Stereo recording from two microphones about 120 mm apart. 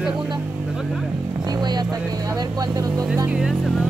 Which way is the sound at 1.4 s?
35° right (ahead or behind).